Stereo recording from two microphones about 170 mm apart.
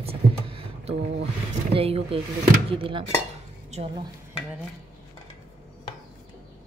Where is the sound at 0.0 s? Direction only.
35° right (ahead or behind).